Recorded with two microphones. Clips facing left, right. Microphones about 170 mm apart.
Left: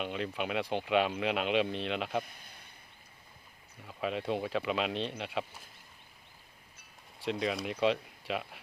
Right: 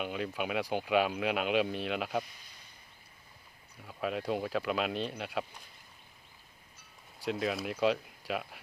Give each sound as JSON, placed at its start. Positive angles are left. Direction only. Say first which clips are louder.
{"t": 0.0, "sound": "speech", "louder": "even", "side_deg": -5}
{"t": 2.2, "sound": "a sound", "louder": "left 3 dB", "side_deg": 55}
{"t": 3.8, "sound": "speech", "louder": "even", "side_deg": 0}
{"t": 7.2, "sound": "speech", "louder": "even", "side_deg": 0}